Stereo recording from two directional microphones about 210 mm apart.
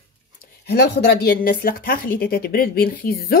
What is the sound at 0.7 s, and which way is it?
Speech, 50° left (ahead or behind).